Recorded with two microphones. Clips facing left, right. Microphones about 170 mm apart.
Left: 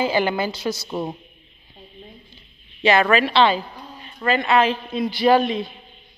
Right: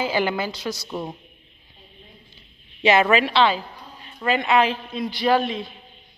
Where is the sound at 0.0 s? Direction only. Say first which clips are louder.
Left 2 dB; 5° right (ahead or behind).